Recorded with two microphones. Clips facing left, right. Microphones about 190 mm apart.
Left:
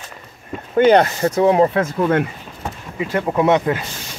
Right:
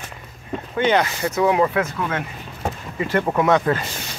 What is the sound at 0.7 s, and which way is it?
Speech, 40° left (ahead or behind).